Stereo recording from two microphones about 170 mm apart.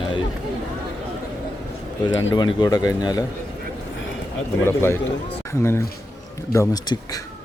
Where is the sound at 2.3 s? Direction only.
25° left (ahead or behind).